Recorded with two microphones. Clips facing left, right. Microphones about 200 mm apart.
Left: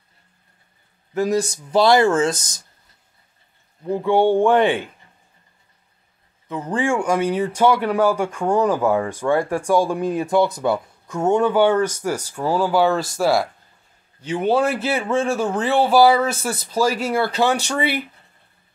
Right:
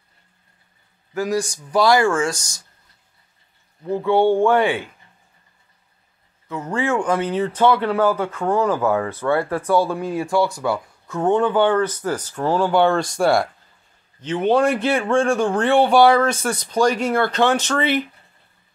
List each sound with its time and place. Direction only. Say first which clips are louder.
1.1 s speech: left 2 dB; 20° left (ahead or behind)
3.8 s speech: even; 15° left (ahead or behind)
6.7 s speech: even; 15° left (ahead or behind)